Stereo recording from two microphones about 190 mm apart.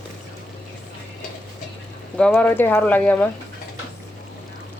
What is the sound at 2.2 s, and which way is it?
Speech, 5° left (ahead or behind).